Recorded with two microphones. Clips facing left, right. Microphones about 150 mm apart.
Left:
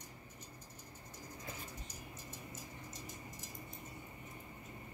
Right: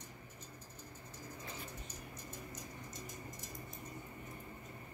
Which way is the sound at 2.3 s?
Centre (ahead or behind).